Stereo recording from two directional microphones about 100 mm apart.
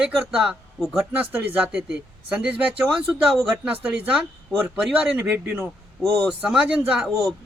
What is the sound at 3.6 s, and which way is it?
Speech, 15° right (ahead or behind).